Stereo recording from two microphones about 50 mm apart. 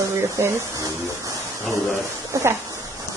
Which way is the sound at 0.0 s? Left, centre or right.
Right.